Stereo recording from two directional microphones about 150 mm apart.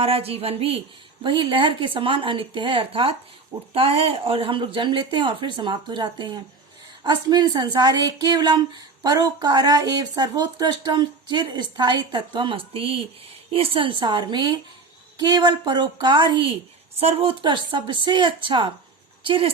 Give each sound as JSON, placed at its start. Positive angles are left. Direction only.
{"t": 0.0, "sound": "a woman's voice", "side_deg": -40}